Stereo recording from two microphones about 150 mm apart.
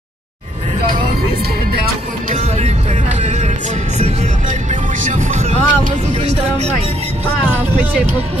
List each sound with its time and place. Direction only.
2.3 s music: 50° right (ahead or behind)
5.0 s music: 50° right (ahead or behind)